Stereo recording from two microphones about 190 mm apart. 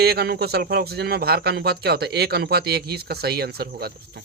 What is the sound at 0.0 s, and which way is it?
Speech, 55° right (ahead or behind).